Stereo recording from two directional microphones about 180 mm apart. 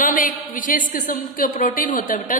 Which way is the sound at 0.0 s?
50° left (ahead or behind).